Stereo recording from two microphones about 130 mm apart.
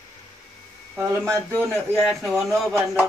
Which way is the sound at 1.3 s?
20° right (ahead or behind).